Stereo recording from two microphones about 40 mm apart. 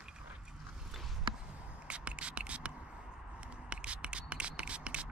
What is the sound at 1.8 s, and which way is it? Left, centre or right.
Whispering, right.